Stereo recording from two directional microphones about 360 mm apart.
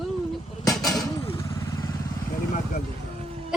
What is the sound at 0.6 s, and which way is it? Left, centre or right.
Vehicle, centre.